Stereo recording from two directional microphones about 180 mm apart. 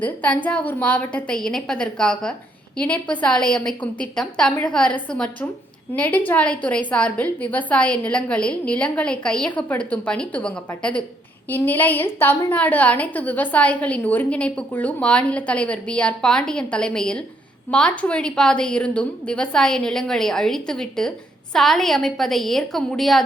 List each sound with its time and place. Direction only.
0.0 s a woman's voice: 10° left (ahead or behind)